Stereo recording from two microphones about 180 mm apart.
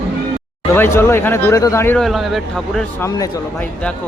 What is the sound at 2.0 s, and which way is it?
Speech, centre (ahead or behind).